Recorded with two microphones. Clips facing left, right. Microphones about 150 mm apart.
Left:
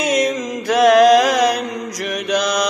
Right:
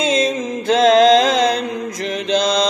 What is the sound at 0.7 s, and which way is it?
Mantra, 25° right (ahead or behind).